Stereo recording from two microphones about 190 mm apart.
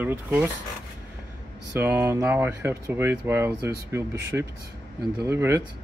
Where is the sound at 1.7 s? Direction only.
10° right (ahead or behind).